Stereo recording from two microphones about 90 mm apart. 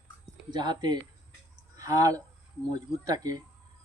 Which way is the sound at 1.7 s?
40° right (ahead or behind).